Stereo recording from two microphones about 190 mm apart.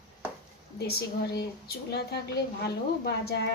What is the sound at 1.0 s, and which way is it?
Speech, 60° left (ahead or behind).